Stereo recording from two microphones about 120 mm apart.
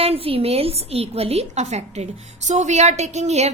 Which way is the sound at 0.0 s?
55° right (ahead or behind).